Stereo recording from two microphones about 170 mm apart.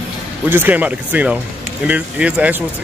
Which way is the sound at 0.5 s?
10° right (ahead or behind).